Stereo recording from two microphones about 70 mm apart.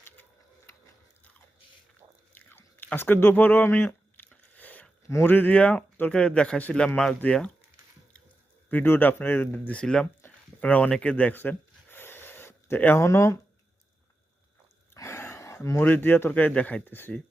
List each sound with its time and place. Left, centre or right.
2.3 s chewing: left
5.2 s speech: left; by 7.2 s centre
8.7 s speech: left
9.5 s speech: left
10.2 s a sound: left
13.0 s speech: left
14.9 s a sound: left
16.5 s speech: centre